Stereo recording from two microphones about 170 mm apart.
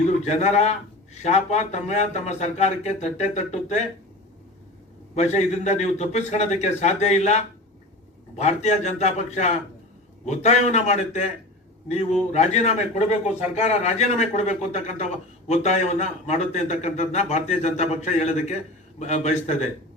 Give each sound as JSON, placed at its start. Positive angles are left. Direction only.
{"t": 0.3, "sound": "a man's voice", "side_deg": 40}
{"t": 5.1, "sound": "a man's voice", "side_deg": 40}